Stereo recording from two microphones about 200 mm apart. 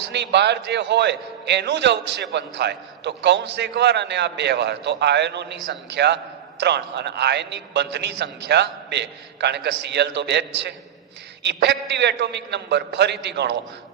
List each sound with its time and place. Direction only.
0.1 s a man's voice: 60° right (ahead or behind)